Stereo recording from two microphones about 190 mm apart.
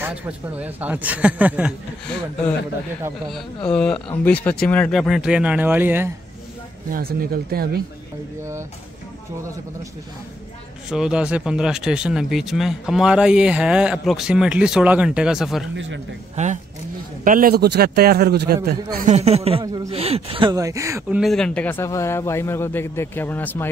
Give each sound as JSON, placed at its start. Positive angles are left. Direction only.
{"t": 0.0, "sound": "speech", "side_deg": -10}
{"t": 6.9, "sound": "speech", "side_deg": -50}
{"t": 10.9, "sound": "speech", "side_deg": -5}
{"t": 15.7, "sound": "a man's voice", "side_deg": -80}
{"t": 16.4, "sound": "a man's voice", "side_deg": -35}
{"t": 19.0, "sound": "a man's voice", "side_deg": -35}
{"t": 19.6, "sound": "speech", "side_deg": -20}
{"t": 19.9, "sound": "speech", "side_deg": -30}
{"t": 21.2, "sound": "a man's voice", "side_deg": 0}